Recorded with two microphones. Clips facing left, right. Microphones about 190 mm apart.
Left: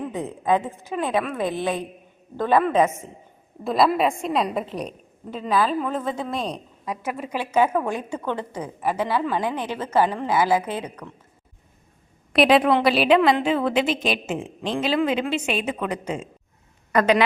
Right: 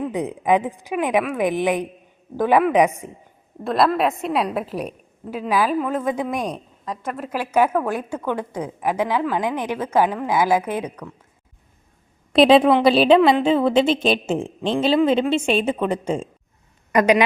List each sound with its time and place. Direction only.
0.0 s a woman's voice: 15° right (ahead or behind)
3.6 s a woman's voice: centre (ahead or behind)
6.8 s a woman's voice: 10° left (ahead or behind)
7.3 s a woman's voice: 10° right (ahead or behind)
12.3 s a woman's voice: 25° right (ahead or behind)
16.9 s a woman's voice: 15° right (ahead or behind)